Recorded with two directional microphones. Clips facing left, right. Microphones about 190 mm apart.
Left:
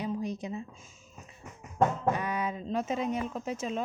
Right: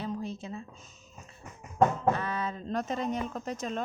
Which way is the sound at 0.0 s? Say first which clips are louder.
Left 2 dB; 15° left (ahead or behind).